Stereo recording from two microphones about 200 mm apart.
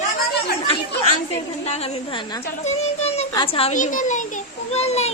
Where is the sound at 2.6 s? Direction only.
35° left (ahead or behind).